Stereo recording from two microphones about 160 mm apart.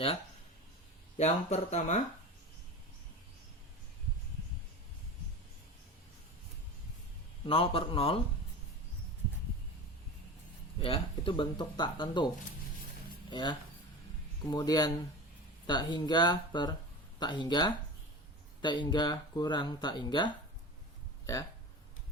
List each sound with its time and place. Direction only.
1.2 s speech: 45° left (ahead or behind)
7.4 s speech: 35° left (ahead or behind)
10.8 s speech: 35° left (ahead or behind)
13.3 s speech: 30° left (ahead or behind)